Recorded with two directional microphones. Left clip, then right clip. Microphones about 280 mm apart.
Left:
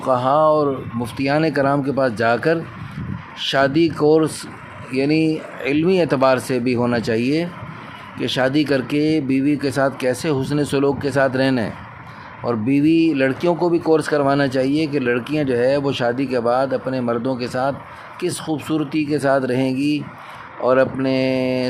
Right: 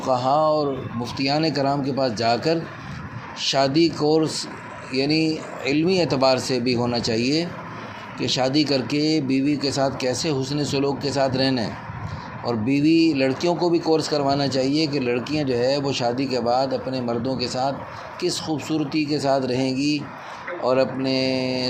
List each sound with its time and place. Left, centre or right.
0.0 s speech: centre